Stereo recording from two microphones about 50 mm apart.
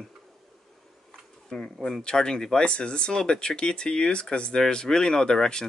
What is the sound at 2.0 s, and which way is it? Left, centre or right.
Speech, centre.